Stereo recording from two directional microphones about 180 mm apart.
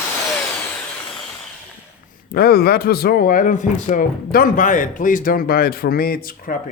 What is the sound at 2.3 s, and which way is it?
A man's voice, 60° left (ahead or behind).